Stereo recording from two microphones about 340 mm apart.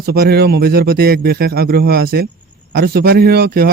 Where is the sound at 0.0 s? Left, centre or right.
Right.